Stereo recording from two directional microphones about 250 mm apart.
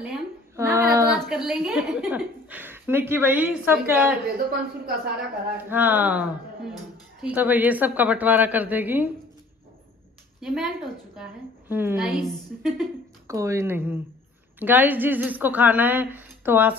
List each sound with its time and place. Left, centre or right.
0.0 s a sound: centre
1.1 s a woman's voice: centre
4.5 s speech: right
5.7 s a woman's voice: centre
10.4 s a woman's voice: centre
13.3 s a woman's voice: centre